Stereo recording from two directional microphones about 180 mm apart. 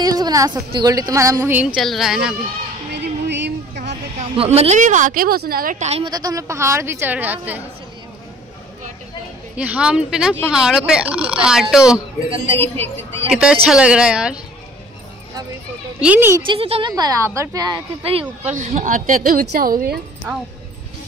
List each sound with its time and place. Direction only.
0.0 s a woman's voice: 20° right (ahead or behind); by 2.3 s 5° right (ahead or behind)
2.9 s a sound: 75° right (ahead or behind)
3.7 s speech: 35° right (ahead or behind)
6.0 s a woman's voice: 20° right (ahead or behind)
9.6 s speech: 5° right (ahead or behind)
13.3 s speech: 5° right (ahead or behind)
16.0 s a woman's voice: 10° right (ahead or behind)
16.4 s speech: 30° right (ahead or behind)
16.9 s a woman's voice: 20° right (ahead or behind)
18.4 s speech: 40° right (ahead or behind)